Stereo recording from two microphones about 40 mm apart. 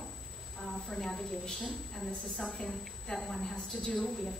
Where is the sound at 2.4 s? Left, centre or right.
Centre.